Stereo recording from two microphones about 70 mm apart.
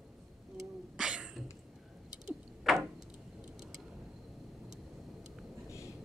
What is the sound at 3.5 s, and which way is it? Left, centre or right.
Vehicle, centre.